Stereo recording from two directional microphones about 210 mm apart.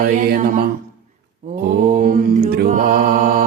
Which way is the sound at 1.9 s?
45° right (ahead or behind).